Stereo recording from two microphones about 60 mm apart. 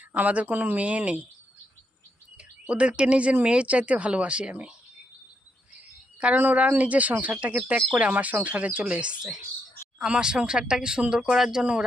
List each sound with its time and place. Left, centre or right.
0.2 s speech: right
2.4 s speech: centre
6.3 s speech: right; by 11.6 s centre
11.6 s speech: centre